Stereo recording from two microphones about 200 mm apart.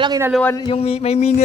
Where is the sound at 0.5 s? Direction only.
30° left (ahead or behind).